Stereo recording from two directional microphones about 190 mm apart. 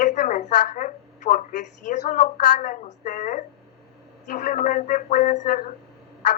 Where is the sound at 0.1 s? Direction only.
40° left (ahead or behind).